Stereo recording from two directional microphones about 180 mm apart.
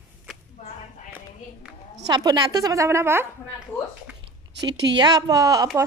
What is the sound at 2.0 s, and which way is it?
A woman's voice, 20° right (ahead or behind).